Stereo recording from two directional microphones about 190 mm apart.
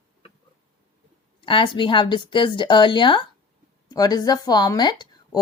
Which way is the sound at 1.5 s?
25° left (ahead or behind).